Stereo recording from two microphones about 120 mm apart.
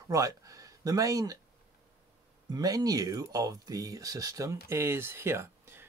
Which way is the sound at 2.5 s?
30° right (ahead or behind).